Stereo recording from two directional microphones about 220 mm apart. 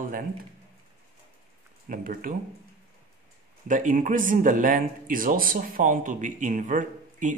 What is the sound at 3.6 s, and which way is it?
Speech, 35° right (ahead or behind).